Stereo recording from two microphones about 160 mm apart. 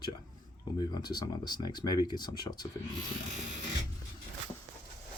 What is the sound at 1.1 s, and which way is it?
Speech, 25° left (ahead or behind).